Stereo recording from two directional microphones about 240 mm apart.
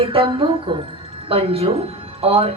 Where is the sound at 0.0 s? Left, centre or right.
Right.